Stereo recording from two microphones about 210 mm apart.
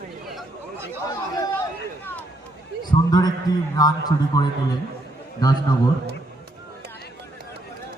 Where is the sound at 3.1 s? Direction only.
20° left (ahead or behind).